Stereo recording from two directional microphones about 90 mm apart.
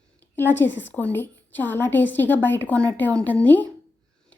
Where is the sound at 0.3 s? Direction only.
25° left (ahead or behind).